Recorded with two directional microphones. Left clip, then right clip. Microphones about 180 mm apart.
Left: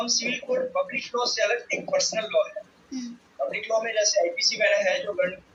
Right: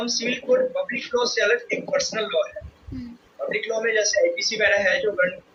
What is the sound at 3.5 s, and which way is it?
A man's voice, 40° right (ahead or behind).